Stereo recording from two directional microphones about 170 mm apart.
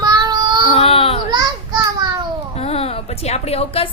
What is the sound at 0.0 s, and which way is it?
Child singing, 25° right (ahead or behind).